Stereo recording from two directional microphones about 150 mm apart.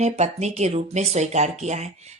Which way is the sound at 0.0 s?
50° right (ahead or behind).